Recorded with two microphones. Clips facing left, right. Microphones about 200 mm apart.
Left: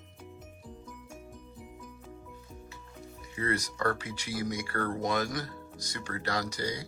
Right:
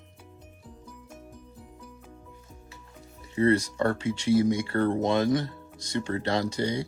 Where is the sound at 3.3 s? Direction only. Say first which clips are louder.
Right 10 dB; 30° right (ahead or behind).